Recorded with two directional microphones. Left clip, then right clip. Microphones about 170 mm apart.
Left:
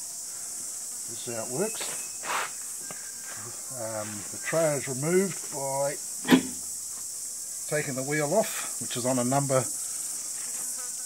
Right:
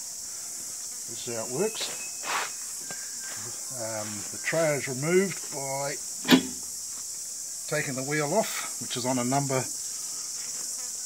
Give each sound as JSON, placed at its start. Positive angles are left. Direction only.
{"t": 1.2, "sound": "speech", "side_deg": 0}
{"t": 3.8, "sound": "speech", "side_deg": 5}
{"t": 7.7, "sound": "speech", "side_deg": 10}